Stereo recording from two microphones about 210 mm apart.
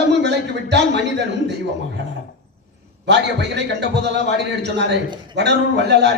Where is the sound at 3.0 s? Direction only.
55° right (ahead or behind).